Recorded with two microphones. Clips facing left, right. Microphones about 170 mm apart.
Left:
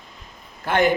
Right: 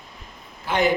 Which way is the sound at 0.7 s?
55° left (ahead or behind).